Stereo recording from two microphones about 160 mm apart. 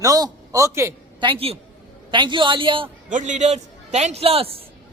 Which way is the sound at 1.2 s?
35° right (ahead or behind).